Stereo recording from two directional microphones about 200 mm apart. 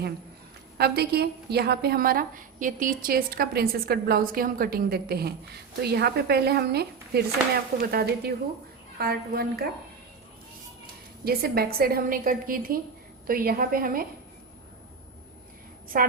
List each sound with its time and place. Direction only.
0.8 s a woman's voice: 55° right (ahead or behind)
11.3 s a woman's voice: 50° right (ahead or behind)
15.9 s a woman's voice: 45° right (ahead or behind)